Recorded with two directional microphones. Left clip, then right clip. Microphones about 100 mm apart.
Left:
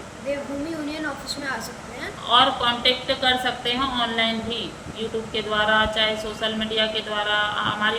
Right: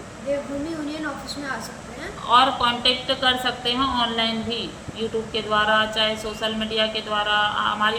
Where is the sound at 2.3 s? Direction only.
40° right (ahead or behind).